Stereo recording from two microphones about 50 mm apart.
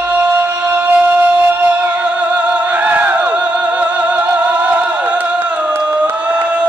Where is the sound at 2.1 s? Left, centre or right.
Right.